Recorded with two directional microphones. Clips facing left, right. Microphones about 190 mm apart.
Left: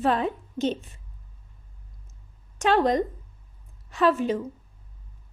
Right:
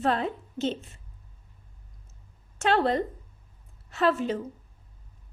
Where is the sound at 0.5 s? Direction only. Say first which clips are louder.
Left 3 dB; 15° left (ahead or behind).